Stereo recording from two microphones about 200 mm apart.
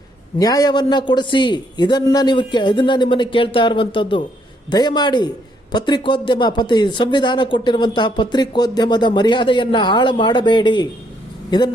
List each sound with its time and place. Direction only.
0.3 s a man's voice: 20° left (ahead or behind)